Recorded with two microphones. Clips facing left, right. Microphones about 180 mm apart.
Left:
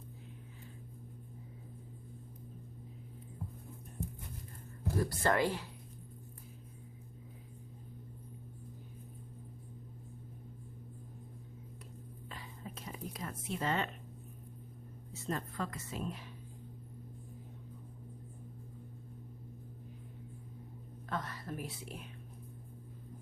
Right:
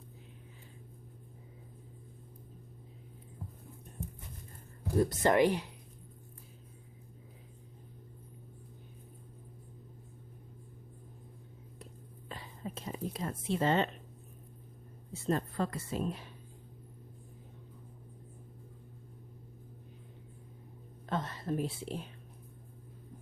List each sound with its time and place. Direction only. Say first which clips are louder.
4.9 s a woman's voice: right 5 dB; 20° right (ahead or behind)
12.3 s whispering: right 6 dB; 30° right (ahead or behind)
15.1 s a woman's voice: right 6 dB; 35° right (ahead or behind)
21.1 s whispering: right 6 dB; 25° right (ahead or behind)